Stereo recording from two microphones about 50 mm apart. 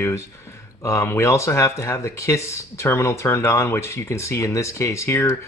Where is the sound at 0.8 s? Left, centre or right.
Left.